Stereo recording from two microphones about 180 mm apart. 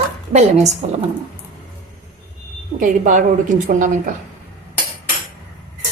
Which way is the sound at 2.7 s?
45° right (ahead or behind).